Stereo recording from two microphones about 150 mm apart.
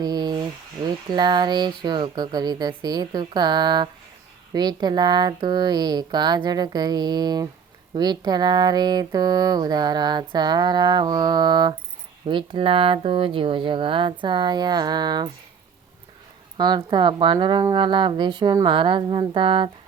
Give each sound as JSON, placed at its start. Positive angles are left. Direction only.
{"t": 0.0, "sound": "a sound", "side_deg": -30}
{"t": 0.9, "sound": "speech", "side_deg": -30}
{"t": 16.6, "sound": "speech", "side_deg": -30}